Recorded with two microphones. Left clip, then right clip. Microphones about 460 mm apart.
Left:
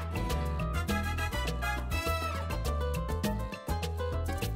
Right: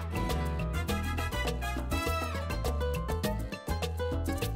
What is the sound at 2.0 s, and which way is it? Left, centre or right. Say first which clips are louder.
Music: even; right.